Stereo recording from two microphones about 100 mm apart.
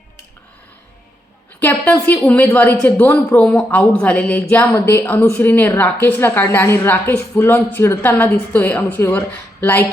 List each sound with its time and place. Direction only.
1.5 s a woman's voice: 20° left (ahead or behind)